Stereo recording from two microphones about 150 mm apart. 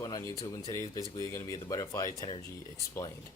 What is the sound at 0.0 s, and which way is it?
Speech, 25° left (ahead or behind).